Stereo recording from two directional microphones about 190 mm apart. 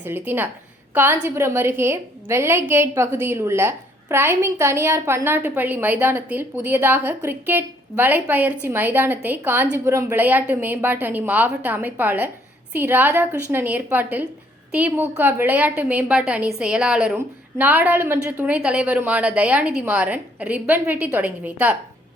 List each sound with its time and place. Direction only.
0.0 s a woman's voice: 10° right (ahead or behind)